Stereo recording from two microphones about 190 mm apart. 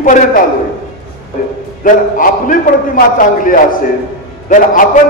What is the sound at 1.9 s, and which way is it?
A man's voice, 45° left (ahead or behind).